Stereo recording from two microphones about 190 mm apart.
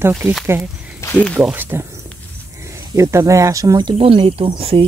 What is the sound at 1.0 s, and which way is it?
Speech, 5° left (ahead or behind).